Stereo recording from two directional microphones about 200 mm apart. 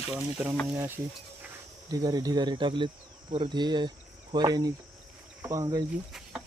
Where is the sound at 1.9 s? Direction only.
20° right (ahead or behind).